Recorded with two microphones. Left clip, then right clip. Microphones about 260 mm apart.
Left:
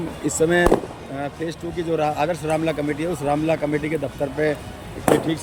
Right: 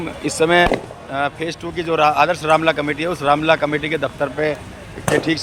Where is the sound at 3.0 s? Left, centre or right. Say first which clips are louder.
Right 5 dB; centre.